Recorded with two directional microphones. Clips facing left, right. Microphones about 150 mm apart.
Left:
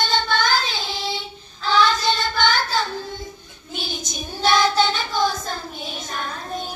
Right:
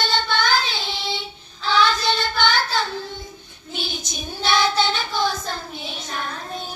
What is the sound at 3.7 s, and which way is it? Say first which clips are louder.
Child singing: even; 45° left (ahead or behind).